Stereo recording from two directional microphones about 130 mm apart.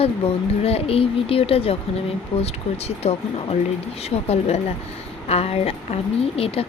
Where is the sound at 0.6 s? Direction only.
50° left (ahead or behind).